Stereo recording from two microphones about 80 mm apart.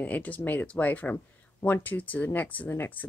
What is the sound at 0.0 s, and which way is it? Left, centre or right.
Speech, centre.